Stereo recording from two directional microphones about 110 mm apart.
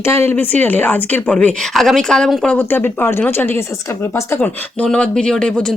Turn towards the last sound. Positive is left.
turn(degrees=5)  # may be behind; listen again after turning